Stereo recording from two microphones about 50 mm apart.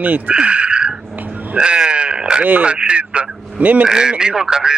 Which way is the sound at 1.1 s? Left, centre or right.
Right.